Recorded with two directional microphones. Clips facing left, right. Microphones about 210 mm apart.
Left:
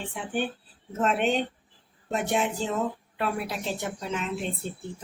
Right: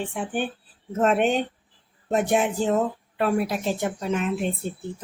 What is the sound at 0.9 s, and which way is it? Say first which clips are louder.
A woman's voice: right 4 dB; 50° right (ahead or behind).